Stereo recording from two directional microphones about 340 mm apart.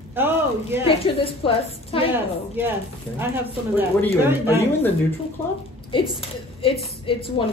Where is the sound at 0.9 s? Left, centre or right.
Centre.